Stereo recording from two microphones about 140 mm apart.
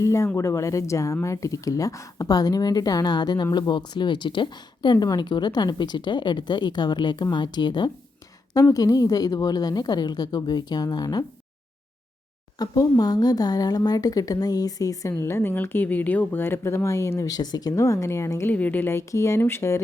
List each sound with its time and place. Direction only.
0.0 s speech: 20° left (ahead or behind)
12.5 s speech: 25° left (ahead or behind)